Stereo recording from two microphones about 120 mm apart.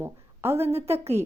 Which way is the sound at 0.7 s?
60° right (ahead or behind).